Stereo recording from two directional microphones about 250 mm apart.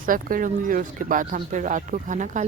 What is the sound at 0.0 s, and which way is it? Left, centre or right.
Speech, right.